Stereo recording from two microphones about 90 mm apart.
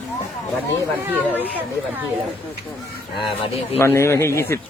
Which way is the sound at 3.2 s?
75° left (ahead or behind).